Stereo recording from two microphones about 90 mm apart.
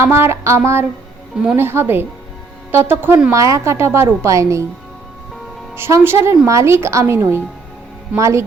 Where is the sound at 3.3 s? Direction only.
35° right (ahead or behind).